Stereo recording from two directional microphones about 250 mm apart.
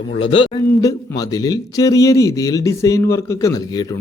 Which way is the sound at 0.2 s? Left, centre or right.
Left.